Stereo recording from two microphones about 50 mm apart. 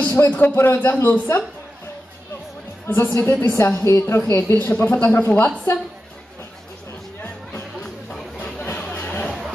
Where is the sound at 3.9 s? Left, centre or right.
Left.